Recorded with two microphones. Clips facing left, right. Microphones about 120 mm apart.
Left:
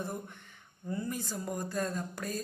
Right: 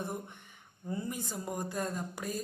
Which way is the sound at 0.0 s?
20° right (ahead or behind).